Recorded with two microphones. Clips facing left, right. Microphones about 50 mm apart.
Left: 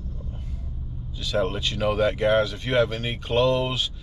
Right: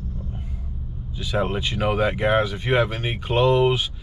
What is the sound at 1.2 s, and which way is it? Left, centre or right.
Speech, centre.